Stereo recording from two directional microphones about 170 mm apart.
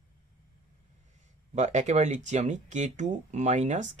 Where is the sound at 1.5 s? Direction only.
45° right (ahead or behind).